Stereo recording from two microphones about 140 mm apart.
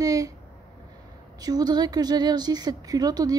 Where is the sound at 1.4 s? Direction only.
30° right (ahead or behind).